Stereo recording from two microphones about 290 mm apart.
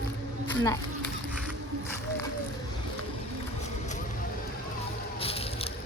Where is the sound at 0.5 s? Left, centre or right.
Centre.